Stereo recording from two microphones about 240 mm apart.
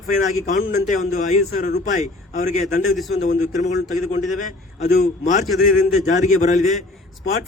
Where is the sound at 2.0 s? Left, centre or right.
Left.